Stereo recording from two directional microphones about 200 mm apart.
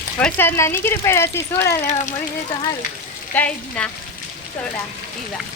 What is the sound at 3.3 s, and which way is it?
Speech, 5° left (ahead or behind).